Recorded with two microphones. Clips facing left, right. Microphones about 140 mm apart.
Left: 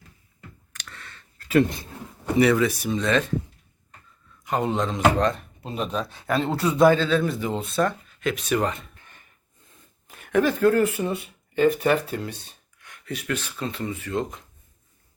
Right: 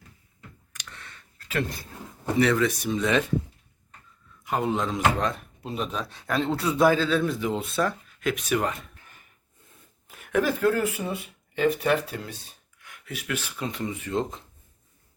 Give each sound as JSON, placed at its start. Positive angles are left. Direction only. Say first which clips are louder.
{"t": 0.7, "sound": "clicking", "louder": "left 1 dB", "side_deg": -15}
{"t": 2.4, "sound": "speech", "louder": "left 3 dB", "side_deg": 10}
{"t": 3.0, "sound": "speech", "louder": "left 1 dB", "side_deg": -10}
{"t": 4.4, "sound": "speech", "louder": "left 2 dB", "side_deg": 0}